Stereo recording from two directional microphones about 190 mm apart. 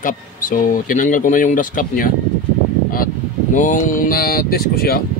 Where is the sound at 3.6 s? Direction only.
40° left (ahead or behind).